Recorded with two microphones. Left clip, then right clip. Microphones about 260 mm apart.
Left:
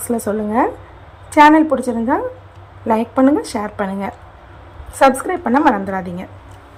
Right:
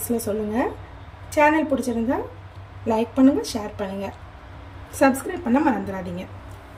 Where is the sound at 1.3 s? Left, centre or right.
Left.